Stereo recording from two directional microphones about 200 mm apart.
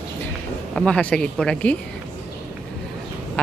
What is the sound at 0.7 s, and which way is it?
Speech, 5° left (ahead or behind).